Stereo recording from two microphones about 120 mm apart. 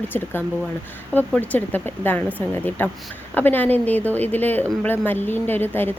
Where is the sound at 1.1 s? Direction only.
15° left (ahead or behind).